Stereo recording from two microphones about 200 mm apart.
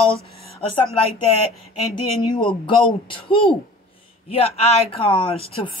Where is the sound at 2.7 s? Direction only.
25° left (ahead or behind).